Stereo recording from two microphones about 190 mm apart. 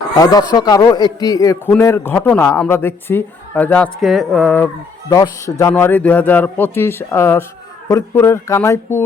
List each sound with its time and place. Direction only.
0.2 s a man's voice: 20° left (ahead or behind)